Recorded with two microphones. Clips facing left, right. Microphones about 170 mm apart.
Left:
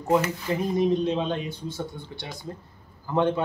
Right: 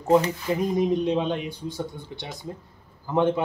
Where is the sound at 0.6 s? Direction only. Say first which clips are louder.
Left 1 dB; 15° right (ahead or behind).